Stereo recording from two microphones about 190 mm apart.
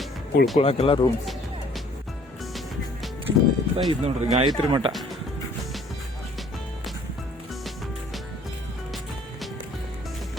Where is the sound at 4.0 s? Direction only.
35° right (ahead or behind).